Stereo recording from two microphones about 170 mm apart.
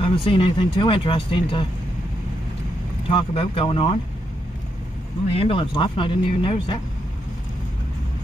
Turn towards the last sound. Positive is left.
turn(degrees=30)  # may be behind; listen again after turning